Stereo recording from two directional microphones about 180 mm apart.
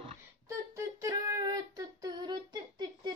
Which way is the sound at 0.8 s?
15° right (ahead or behind).